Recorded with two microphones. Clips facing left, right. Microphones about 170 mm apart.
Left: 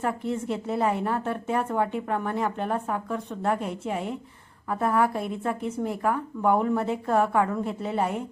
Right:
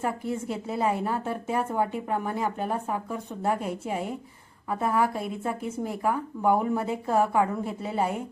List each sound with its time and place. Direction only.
0.0 s a woman's voice: centre (ahead or behind)